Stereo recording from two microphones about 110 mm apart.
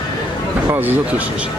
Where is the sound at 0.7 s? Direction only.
20° right (ahead or behind).